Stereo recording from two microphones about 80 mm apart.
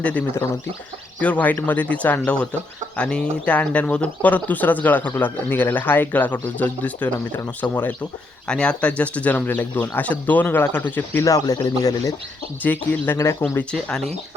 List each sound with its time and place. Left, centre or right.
0.0 s speech: centre
8.4 s speech: centre
11.3 s a man's voice: left
12.6 s speech: left